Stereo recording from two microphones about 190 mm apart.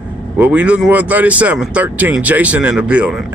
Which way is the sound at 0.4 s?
10° right (ahead or behind).